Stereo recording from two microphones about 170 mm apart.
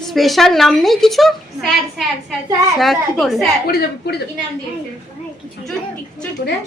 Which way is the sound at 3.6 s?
70° left (ahead or behind).